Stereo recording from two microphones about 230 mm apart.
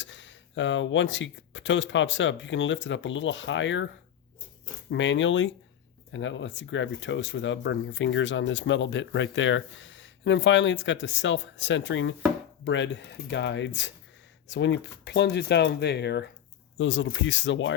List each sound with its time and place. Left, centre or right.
0.0 s speech: left
4.9 s speech: left